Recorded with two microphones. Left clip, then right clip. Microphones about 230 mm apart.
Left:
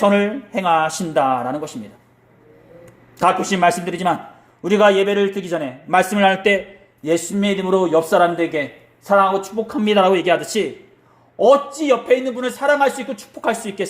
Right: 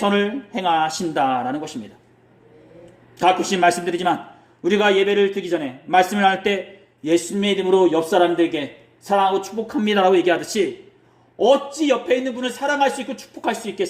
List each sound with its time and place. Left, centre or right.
0.0 s a man's voice: left
3.2 s a man's voice: centre